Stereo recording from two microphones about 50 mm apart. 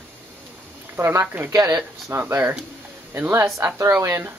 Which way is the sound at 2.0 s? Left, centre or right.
Right.